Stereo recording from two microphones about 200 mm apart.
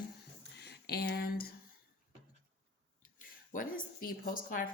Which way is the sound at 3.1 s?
40° left (ahead or behind).